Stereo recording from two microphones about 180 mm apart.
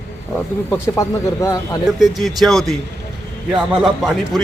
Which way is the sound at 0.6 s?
10° left (ahead or behind).